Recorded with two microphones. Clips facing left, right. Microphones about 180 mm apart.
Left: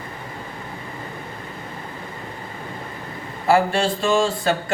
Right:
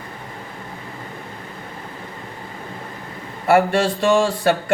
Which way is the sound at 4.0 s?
65° right (ahead or behind).